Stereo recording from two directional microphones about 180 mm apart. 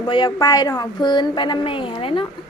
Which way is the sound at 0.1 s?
25° left (ahead or behind).